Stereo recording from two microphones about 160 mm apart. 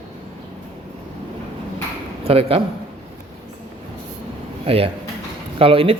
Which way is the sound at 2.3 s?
35° right (ahead or behind).